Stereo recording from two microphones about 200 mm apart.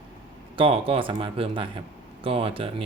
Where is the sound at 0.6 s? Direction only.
25° right (ahead or behind).